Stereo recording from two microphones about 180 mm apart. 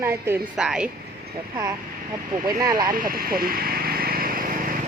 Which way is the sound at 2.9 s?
55° right (ahead or behind).